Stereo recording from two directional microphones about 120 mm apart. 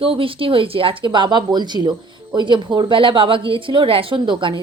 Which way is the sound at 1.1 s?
40° right (ahead or behind).